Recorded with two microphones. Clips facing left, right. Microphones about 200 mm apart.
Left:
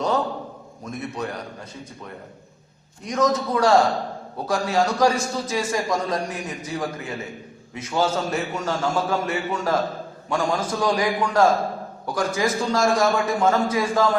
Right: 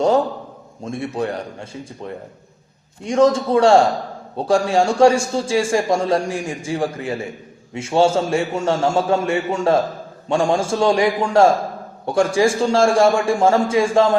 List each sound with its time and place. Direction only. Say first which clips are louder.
0.9 s a man's voice: right 6 dB; 30° right (ahead or behind)
3.0 s a man's voice: right 6 dB; 30° right (ahead or behind)